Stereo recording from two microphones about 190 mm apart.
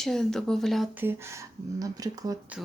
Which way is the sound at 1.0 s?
10° right (ahead or behind).